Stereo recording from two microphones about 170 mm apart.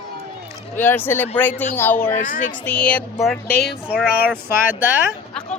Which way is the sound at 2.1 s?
50° left (ahead or behind).